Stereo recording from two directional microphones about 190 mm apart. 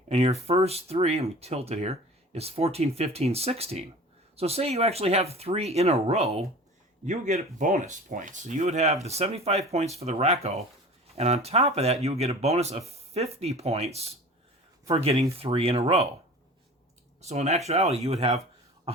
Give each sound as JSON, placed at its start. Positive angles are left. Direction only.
{"t": 0.1, "sound": "speech", "side_deg": -35}
{"t": 17.2, "sound": "speech", "side_deg": -35}